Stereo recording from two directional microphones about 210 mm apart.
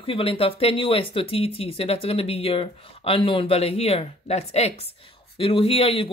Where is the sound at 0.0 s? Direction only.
25° left (ahead or behind).